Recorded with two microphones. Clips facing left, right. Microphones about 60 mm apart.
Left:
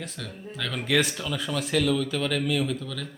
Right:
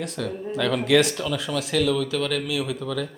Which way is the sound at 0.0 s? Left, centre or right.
Centre.